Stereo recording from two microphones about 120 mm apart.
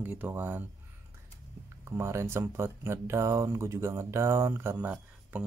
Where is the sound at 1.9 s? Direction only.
20° right (ahead or behind).